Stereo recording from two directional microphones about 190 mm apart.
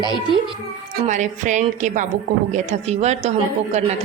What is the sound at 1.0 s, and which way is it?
A woman's voice, 40° right (ahead or behind).